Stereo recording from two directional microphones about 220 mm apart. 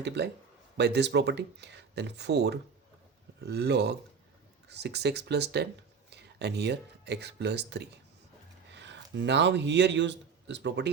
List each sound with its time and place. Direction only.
0.2 s speech: 50° right (ahead or behind)
8.7 s a sound: 50° right (ahead or behind)
9.1 s speech: 55° right (ahead or behind)